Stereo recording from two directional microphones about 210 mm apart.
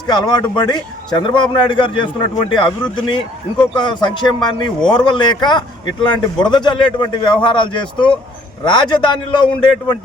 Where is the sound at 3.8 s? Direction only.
20° left (ahead or behind).